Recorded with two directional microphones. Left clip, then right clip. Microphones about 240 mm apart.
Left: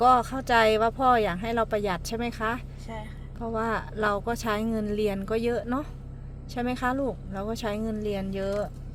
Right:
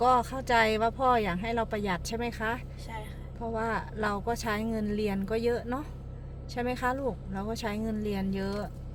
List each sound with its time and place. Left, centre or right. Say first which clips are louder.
0.0 s speech: left 4 dB; left